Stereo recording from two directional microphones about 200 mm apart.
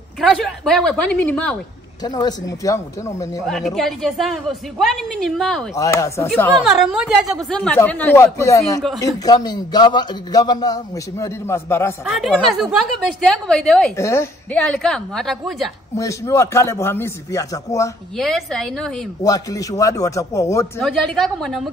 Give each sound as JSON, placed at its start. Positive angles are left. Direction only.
{"t": 0.2, "sound": "a woman's voice", "side_deg": 0}
{"t": 2.0, "sound": "speech", "side_deg": 20}
{"t": 3.4, "sound": "a woman's voice", "side_deg": 0}
{"t": 5.8, "sound": "speech", "side_deg": 15}
{"t": 6.6, "sound": "a man's voice", "side_deg": 0}
{"t": 12.1, "sound": "a woman's voice", "side_deg": 0}
{"t": 13.9, "sound": "a woman's voice", "side_deg": 15}
{"t": 16.0, "sound": "speech", "side_deg": 15}
{"t": 18.1, "sound": "a woman's voice", "side_deg": 0}
{"t": 19.2, "sound": "speech", "side_deg": 15}
{"t": 20.8, "sound": "a woman's voice", "side_deg": 0}